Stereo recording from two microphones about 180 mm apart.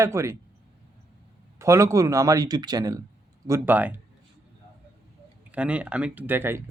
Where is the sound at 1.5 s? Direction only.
15° right (ahead or behind).